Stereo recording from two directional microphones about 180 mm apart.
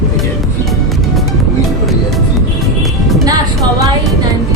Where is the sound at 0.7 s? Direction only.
Centre (ahead or behind).